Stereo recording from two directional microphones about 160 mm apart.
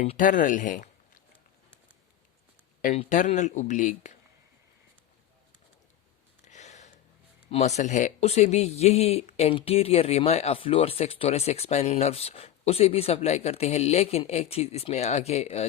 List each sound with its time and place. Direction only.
0.0 s speech: 55° left (ahead or behind)
3.1 s speech: 50° left (ahead or behind)
6.4 s a sound: 45° left (ahead or behind)
7.5 s speech: 45° left (ahead or behind)